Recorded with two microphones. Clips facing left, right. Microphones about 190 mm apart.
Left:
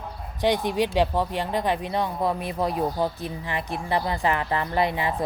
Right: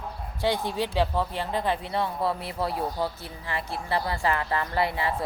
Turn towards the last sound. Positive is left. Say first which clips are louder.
# left 2 dB
turn(degrees=20)  # may be behind; listen again after turning